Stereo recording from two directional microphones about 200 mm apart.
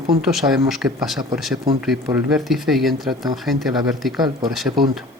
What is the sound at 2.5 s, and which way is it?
Speech, centre (ahead or behind).